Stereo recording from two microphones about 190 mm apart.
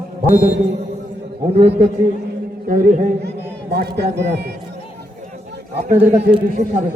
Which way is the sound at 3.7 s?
60° right (ahead or behind).